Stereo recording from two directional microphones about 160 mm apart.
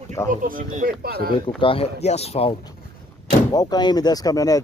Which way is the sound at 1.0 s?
75° right (ahead or behind).